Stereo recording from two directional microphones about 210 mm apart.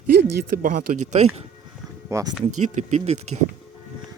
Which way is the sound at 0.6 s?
40° right (ahead or behind).